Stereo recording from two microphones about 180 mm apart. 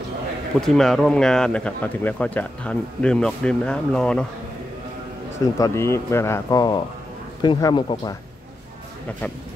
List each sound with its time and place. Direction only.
0.6 s speech: centre (ahead or behind)
5.6 s speech: 15° left (ahead or behind)